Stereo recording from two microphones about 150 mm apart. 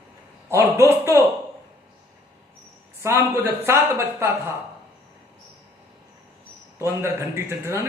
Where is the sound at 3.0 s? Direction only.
20° right (ahead or behind).